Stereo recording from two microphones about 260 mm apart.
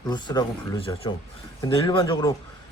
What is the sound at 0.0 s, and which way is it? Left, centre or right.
Speech, centre.